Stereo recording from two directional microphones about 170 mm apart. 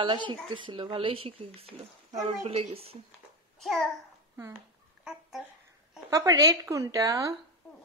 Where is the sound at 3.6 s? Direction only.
Centre (ahead or behind).